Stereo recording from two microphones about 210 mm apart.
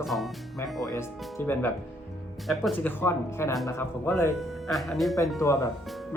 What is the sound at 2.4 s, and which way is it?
Speech, centre (ahead or behind).